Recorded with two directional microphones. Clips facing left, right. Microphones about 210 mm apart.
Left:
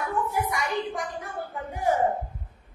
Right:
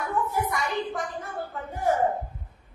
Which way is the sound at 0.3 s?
15° left (ahead or behind).